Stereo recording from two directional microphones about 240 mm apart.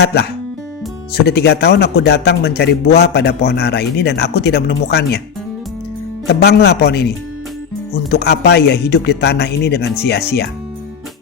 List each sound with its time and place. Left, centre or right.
0.0 s a man's voice: left
1.3 s a man's voice: left
6.2 s a man's voice: left
8.1 s a man's voice: left